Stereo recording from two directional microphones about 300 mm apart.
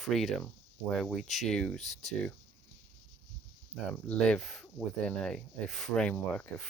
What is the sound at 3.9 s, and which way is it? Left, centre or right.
Speech, centre.